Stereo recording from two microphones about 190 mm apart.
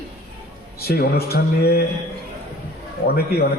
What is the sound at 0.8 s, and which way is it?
A man's voice, 55° left (ahead or behind).